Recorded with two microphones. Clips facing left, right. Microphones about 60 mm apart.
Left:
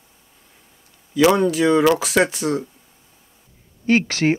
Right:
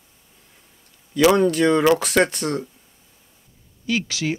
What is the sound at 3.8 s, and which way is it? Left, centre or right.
Speech, left.